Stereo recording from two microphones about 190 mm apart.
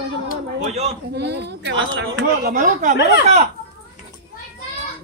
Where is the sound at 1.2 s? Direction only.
65° right (ahead or behind).